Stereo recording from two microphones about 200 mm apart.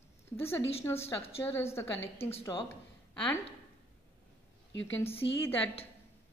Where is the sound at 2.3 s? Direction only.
25° left (ahead or behind).